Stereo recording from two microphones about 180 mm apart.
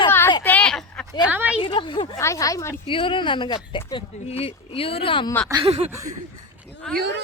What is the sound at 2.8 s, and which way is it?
Speech, 30° left (ahead or behind).